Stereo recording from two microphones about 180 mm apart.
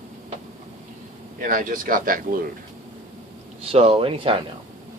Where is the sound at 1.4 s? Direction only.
50° right (ahead or behind).